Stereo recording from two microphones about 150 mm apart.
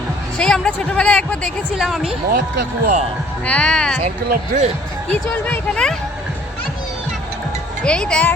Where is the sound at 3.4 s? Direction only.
5° left (ahead or behind).